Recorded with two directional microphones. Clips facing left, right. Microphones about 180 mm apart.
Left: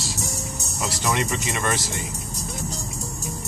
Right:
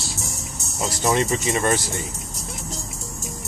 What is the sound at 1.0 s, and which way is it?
Speech, 35° right (ahead or behind).